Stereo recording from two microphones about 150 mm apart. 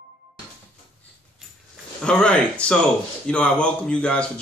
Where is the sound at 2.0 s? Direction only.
5° left (ahead or behind).